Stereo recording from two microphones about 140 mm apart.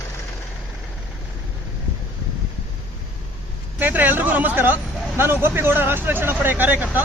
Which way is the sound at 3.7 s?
10° right (ahead or behind).